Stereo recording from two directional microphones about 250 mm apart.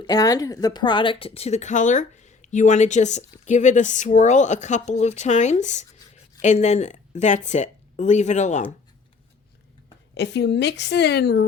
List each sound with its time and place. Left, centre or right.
0.0 s a woman's voice: centre
10.2 s a woman's voice: left